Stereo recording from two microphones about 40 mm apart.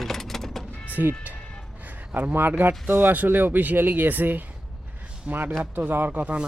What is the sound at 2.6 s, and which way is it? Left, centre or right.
Speech, right.